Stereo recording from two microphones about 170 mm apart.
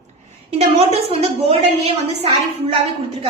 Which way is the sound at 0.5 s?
40° right (ahead or behind).